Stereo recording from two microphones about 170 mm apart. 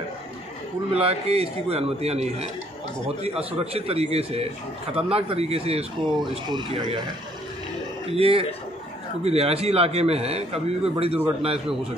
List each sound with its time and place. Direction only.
0.9 s speech: 35° right (ahead or behind)
8.1 s speech: 35° right (ahead or behind)